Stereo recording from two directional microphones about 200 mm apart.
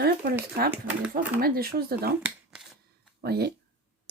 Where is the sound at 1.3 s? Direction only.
50° right (ahead or behind).